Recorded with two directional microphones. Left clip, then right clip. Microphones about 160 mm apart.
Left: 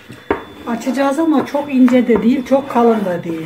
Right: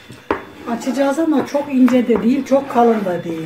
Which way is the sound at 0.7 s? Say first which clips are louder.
Left 1 dB; 15° left (ahead or behind).